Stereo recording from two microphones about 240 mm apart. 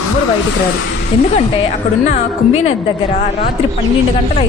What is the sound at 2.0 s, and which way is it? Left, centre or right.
Speech, left.